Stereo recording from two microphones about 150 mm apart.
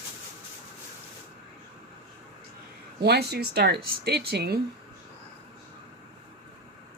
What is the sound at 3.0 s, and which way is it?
Speech, 90° right.